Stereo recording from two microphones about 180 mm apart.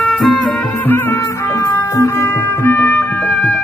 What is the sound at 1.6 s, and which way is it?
Music, 15° left (ahead or behind).